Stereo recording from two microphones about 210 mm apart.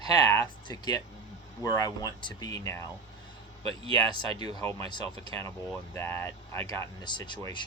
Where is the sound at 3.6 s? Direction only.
25° right (ahead or behind).